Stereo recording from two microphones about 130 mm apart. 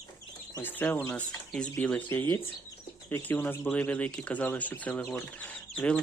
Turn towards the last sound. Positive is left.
turn(degrees=10)  # may be behind; listen again after turning